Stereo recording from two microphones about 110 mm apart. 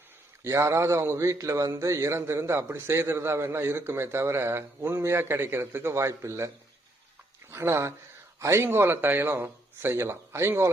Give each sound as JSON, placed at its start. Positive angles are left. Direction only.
{"t": 0.4, "sound": "a man's voice", "side_deg": -25}
{"t": 7.5, "sound": "a man's voice", "side_deg": -25}